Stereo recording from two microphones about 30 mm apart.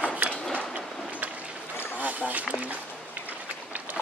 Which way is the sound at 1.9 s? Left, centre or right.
Right.